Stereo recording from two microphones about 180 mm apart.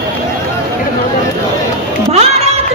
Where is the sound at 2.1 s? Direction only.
35° right (ahead or behind).